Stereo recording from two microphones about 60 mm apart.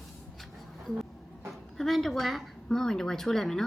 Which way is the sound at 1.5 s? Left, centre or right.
Centre.